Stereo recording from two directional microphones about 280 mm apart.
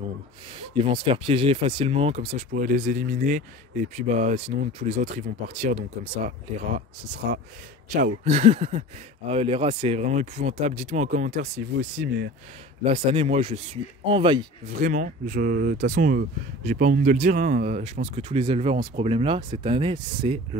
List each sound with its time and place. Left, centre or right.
0.6 s speech: centre
7.2 s speech: right
12.8 s speech: centre